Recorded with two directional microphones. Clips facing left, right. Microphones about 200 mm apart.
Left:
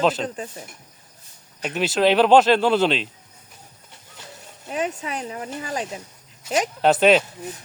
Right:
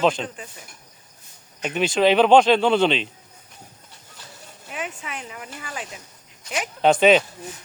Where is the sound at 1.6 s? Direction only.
5° left (ahead or behind).